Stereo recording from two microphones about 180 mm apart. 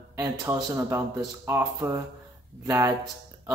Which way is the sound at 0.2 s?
15° right (ahead or behind).